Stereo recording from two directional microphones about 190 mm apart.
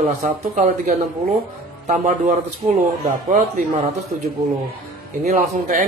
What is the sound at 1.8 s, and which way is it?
Speech, 45° right (ahead or behind).